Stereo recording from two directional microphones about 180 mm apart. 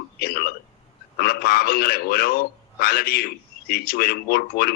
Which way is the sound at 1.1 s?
60° left (ahead or behind).